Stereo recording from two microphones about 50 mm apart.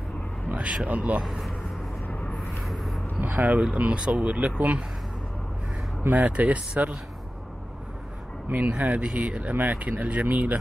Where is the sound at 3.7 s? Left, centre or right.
Right.